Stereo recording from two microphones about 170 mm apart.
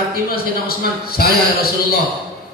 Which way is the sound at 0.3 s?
65° left (ahead or behind).